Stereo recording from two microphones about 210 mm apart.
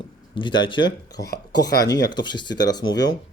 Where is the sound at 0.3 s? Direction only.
20° left (ahead or behind).